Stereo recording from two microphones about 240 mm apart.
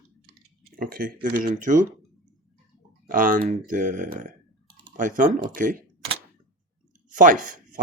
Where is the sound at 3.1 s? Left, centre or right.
Right.